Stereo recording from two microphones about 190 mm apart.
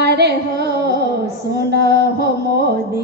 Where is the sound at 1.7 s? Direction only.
60° right (ahead or behind).